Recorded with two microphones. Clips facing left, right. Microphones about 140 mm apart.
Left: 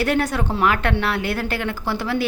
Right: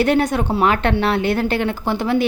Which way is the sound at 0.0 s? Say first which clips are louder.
Right 4 dB; 20° right (ahead or behind).